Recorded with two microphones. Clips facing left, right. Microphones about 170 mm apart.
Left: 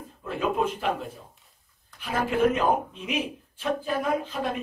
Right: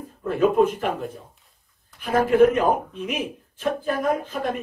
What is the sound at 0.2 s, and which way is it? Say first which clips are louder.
Speech: right 8 dB; 50° right (ahead or behind).